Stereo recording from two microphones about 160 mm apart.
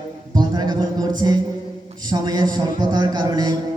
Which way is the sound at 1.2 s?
30° right (ahead or behind).